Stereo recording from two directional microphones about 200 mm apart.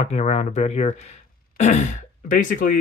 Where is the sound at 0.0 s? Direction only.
35° left (ahead or behind).